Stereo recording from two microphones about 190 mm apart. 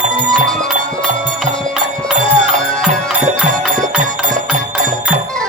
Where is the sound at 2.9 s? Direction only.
40° right (ahead or behind).